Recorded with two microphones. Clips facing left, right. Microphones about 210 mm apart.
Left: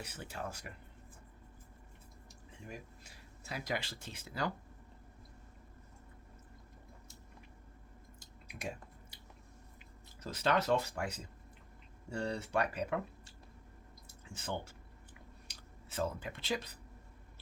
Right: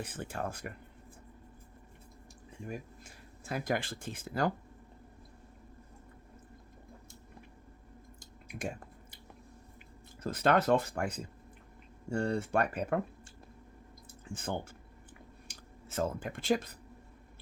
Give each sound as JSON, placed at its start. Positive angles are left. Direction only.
{"t": 0.0, "sound": "speech", "side_deg": -50}
{"t": 2.6, "sound": "speech", "side_deg": -50}
{"t": 8.4, "sound": "chewing", "side_deg": -50}
{"t": 10.2, "sound": "speech", "side_deg": -55}